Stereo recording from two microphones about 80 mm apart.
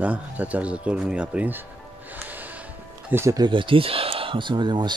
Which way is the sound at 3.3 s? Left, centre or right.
Right.